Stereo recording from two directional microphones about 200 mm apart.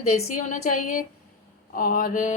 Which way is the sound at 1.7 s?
45° left (ahead or behind).